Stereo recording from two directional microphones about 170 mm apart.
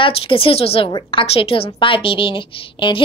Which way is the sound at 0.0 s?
35° left (ahead or behind).